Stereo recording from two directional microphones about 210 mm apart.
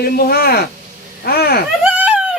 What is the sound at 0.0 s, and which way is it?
Speech, 45° left (ahead or behind).